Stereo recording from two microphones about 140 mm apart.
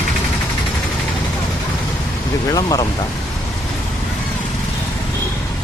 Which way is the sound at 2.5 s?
25° left (ahead or behind).